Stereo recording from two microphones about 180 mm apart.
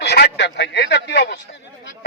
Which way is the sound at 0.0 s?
65° left (ahead or behind).